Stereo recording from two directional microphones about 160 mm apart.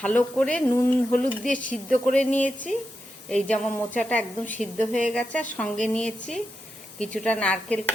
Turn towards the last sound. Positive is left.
turn(degrees=10)  # may be behind; listen again after turning